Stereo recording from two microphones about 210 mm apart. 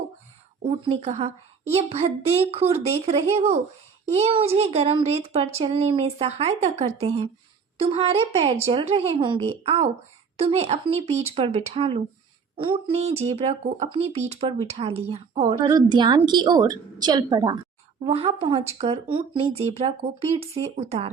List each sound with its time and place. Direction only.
0.9 s speech: 30° right (ahead or behind)